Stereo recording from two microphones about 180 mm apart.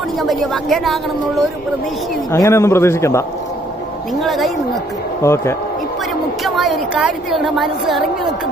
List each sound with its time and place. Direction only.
0.2 s a woman's voice: centre (ahead or behind)
2.3 s a man's voice: 15° left (ahead or behind)
4.2 s a woman's voice: centre (ahead or behind)
5.2 s a man's voice: 15° left (ahead or behind)
6.4 s a woman's voice: centre (ahead or behind)